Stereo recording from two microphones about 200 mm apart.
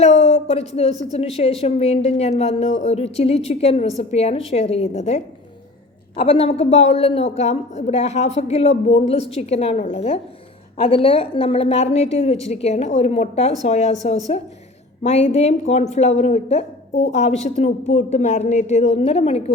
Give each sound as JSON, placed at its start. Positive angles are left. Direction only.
{"t": 0.0, "sound": "a woman's voice", "side_deg": 35}